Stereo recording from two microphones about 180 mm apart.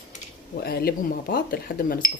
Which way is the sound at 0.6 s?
60° left (ahead or behind).